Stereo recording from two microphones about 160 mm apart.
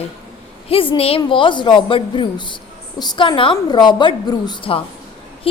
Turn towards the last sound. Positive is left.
turn(degrees=30)  # may be behind; listen again after turning